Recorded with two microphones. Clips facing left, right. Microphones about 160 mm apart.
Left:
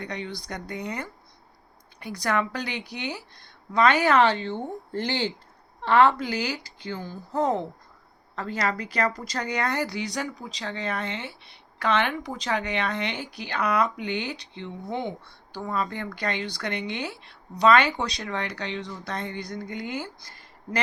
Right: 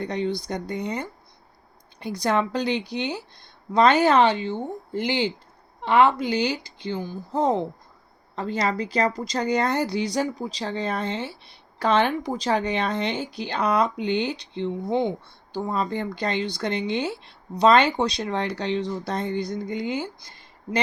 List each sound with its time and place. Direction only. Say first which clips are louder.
0.0 s speech: right 8 dB; 25° right (ahead or behind)
2.2 s speech: right 4 dB; 25° right (ahead or behind)